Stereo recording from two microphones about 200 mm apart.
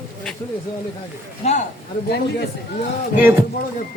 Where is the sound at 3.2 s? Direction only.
10° right (ahead or behind).